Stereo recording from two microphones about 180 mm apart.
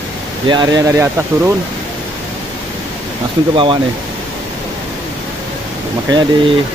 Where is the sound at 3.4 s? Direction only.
25° right (ahead or behind).